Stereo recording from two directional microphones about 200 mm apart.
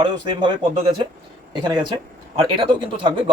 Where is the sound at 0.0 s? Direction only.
20° right (ahead or behind).